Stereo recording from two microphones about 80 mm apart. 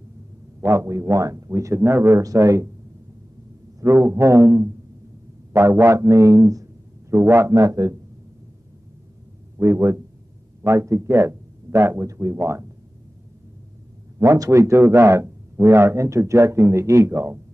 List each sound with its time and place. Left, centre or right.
0.6 s speech: right
2.2 s speech: right
3.8 s speech: right
9.6 s speech: right
14.2 s speech: right